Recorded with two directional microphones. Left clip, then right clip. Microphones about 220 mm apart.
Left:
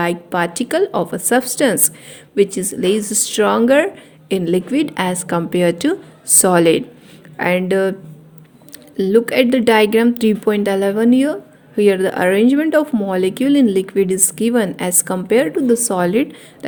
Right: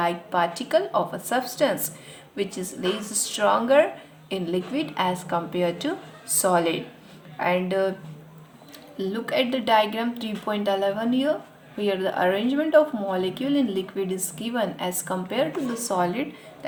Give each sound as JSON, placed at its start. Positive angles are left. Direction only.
{"t": 0.0, "sound": "speech", "side_deg": 45}
{"t": 9.0, "sound": "speech", "side_deg": 45}